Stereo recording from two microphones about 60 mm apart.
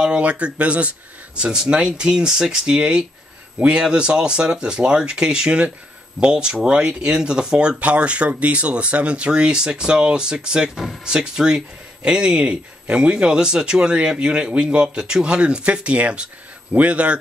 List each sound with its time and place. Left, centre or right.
0.0 s a man's voice: centre